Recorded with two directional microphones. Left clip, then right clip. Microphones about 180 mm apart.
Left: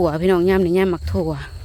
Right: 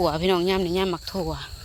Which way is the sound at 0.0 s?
35° left (ahead or behind).